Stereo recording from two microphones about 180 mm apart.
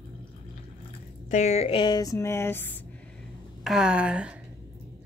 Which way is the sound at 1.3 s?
40° left (ahead or behind).